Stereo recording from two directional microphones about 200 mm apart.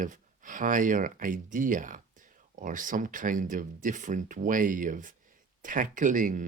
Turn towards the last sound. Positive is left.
turn(degrees=-40)  # may be behind; listen again after turning